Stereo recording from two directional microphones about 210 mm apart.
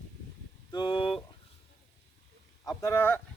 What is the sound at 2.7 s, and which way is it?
Speech, 15° left (ahead or behind).